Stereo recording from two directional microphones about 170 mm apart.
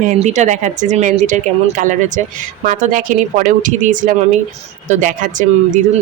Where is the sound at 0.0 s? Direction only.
45° right (ahead or behind).